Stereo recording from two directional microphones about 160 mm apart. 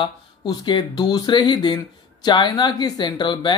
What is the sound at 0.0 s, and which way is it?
Speech, 25° left (ahead or behind).